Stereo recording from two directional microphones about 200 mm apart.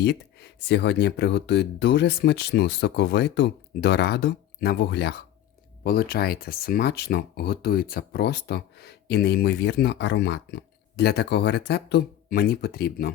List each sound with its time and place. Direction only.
0.0 s speech: 55° left (ahead or behind)